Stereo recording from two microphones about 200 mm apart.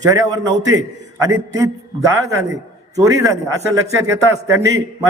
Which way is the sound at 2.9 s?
15° right (ahead or behind).